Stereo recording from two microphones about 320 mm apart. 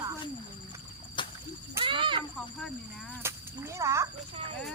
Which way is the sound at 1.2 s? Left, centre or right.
Centre.